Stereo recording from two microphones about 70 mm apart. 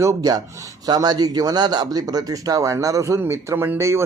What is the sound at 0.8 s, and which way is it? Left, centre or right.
A man's voice, right.